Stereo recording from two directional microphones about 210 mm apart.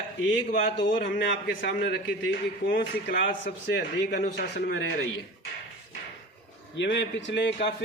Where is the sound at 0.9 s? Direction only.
40° left (ahead or behind).